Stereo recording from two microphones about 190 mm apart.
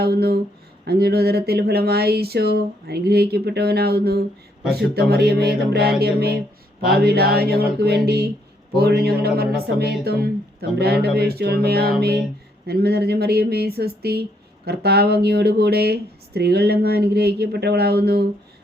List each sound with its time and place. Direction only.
0.0 s speech: 55° right (ahead or behind)
4.6 s speech: centre (ahead or behind)
4.9 s speech: 55° right (ahead or behind)